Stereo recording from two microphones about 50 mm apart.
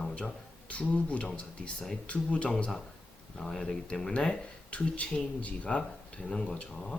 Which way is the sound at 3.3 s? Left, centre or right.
Centre.